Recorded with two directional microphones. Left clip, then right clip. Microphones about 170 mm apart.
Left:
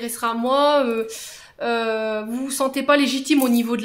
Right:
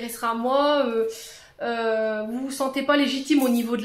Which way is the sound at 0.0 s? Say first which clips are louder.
Left 2 dB; 35° left (ahead or behind).